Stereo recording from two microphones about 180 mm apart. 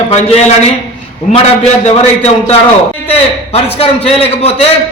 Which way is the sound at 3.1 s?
35° left (ahead or behind).